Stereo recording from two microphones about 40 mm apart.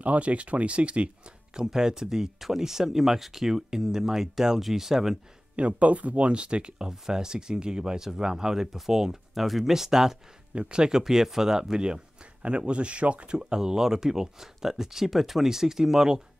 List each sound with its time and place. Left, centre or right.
0.0 s speech: right
1.5 s speech: centre
5.6 s speech: right; by 10.1 s centre
10.5 s speech: right